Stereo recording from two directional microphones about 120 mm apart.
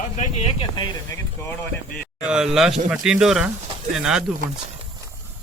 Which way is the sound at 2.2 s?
5° right (ahead or behind).